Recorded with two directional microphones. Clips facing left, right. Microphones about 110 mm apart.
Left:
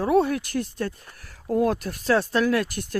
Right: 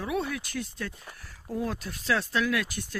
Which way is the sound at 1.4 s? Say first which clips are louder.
Left 10 dB; 65° left (ahead or behind).